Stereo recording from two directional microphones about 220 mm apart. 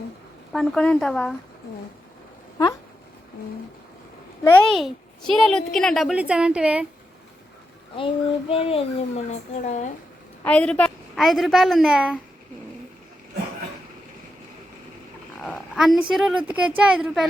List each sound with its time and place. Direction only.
0.5 s a woman's voice: centre (ahead or behind)
4.4 s a woman's voice: 5° left (ahead or behind)
7.9 s speech: 25° left (ahead or behind)
10.4 s a woman's voice: 5° left (ahead or behind)
15.4 s a woman's voice: centre (ahead or behind)